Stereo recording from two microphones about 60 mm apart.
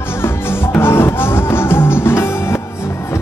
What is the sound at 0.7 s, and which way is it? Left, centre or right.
Music, left.